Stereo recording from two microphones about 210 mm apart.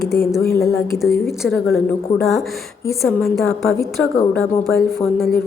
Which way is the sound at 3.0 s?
Centre (ahead or behind).